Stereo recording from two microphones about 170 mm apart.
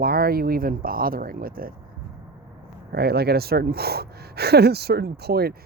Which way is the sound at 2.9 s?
65° right (ahead or behind).